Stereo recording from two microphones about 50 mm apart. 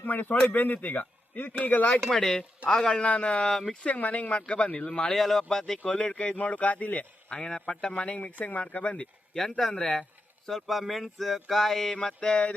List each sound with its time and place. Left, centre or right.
0.0 s a sound: left
0.5 s speech: left
2.0 s speech: centre
2.6 s speech: centre
3.5 s speech: centre
3.8 s speech: left
5.1 s speech: centre
5.8 s speech: left
7.3 s speech: centre
9.3 s speech: centre
9.7 s speech: centre
10.4 s speech: centre